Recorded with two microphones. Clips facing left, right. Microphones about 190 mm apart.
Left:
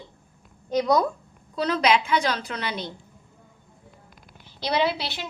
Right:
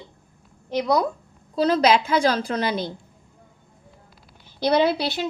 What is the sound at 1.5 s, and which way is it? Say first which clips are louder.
A woman's voice: right 4 dB; 35° right (ahead or behind).